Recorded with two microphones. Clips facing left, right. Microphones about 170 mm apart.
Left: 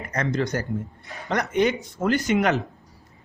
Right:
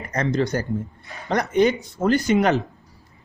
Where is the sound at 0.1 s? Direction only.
30° right (ahead or behind).